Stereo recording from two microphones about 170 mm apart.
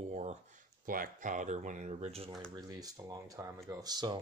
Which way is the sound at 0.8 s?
55° right (ahead or behind).